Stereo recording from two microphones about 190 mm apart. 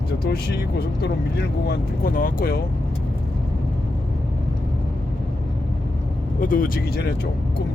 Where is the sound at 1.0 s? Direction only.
60° left (ahead or behind).